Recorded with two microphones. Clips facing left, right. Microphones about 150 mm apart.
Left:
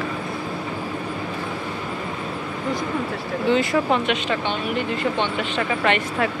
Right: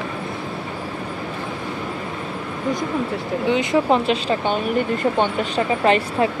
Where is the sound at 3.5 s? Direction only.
20° right (ahead or behind).